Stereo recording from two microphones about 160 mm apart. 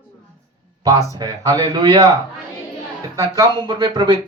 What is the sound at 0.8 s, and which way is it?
Speech, 25° right (ahead or behind).